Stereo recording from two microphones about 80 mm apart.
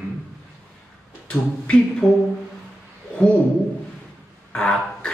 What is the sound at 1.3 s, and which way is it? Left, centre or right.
Speech, centre.